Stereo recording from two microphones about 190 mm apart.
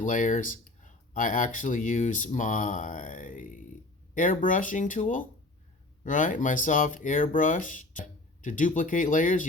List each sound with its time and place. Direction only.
0.0 s speech: 40° left (ahead or behind)